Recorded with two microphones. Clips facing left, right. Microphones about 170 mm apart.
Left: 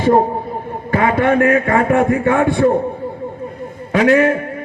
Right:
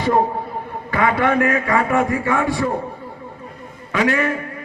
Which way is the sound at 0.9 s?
45° left (ahead or behind).